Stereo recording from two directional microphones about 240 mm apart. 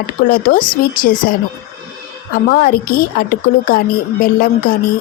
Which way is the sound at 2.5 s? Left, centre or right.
Left.